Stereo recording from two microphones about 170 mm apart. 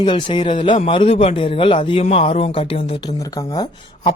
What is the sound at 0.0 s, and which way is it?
Speech, 30° left (ahead or behind).